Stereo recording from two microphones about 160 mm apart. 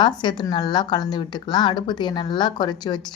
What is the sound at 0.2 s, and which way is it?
Speech, 25° left (ahead or behind).